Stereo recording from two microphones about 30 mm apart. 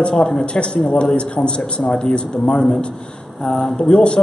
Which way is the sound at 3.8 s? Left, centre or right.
Left.